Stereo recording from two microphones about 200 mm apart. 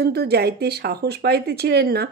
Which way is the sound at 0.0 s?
55° right (ahead or behind).